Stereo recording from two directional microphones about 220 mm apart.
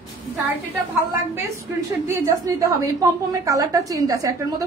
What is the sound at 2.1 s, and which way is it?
A woman's voice, 15° right (ahead or behind).